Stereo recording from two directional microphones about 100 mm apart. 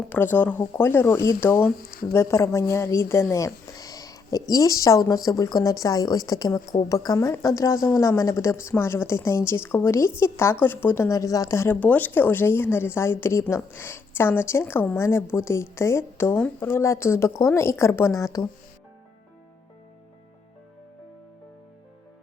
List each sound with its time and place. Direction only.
0.1 s a woman's voice: 20° left (ahead or behind)